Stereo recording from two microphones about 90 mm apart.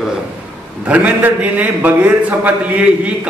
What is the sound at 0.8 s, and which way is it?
A man's voice, 15° right (ahead or behind).